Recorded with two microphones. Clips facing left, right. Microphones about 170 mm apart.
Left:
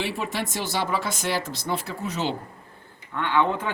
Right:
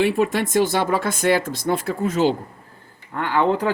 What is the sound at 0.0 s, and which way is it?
Speech, 50° right (ahead or behind).